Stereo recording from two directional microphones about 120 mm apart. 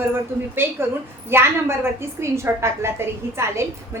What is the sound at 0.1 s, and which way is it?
A woman's voice, 20° right (ahead or behind).